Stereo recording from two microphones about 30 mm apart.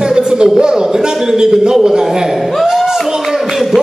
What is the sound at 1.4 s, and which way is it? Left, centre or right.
Speech, right.